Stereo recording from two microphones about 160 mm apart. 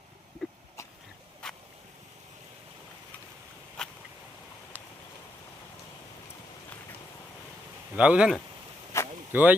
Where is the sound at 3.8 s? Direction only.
5° left (ahead or behind).